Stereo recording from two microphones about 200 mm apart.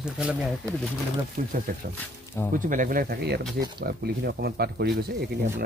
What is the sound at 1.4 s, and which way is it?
Speech, 45° right (ahead or behind).